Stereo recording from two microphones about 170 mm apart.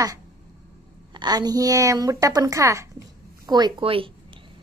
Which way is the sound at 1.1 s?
25° right (ahead or behind).